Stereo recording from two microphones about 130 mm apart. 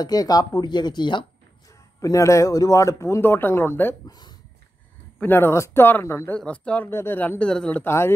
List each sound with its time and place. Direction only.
0.0 s speech: 30° left (ahead or behind)
2.0 s a man's voice: 25° left (ahead or behind)
4.1 s speech: 30° left (ahead or behind)
5.2 s speech: 15° left (ahead or behind)